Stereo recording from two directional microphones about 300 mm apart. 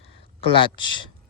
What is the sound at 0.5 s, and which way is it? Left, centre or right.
Speech, centre.